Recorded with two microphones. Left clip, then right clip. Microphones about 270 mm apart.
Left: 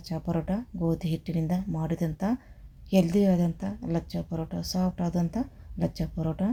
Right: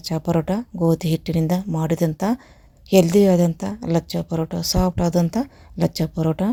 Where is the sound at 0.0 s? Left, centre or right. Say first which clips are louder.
Right 10 dB; right.